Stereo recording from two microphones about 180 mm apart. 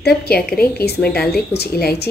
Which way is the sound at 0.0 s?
60° left (ahead or behind).